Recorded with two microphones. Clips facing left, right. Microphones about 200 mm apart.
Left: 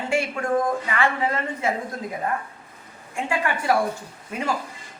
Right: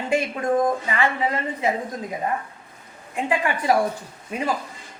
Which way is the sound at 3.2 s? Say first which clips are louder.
Right 2 dB; 15° right (ahead or behind).